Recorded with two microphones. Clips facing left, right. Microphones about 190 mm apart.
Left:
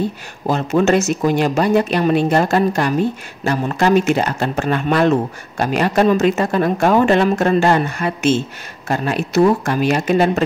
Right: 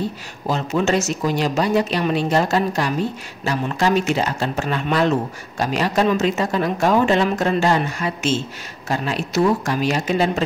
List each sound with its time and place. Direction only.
0.5 s speech: 55° left (ahead or behind)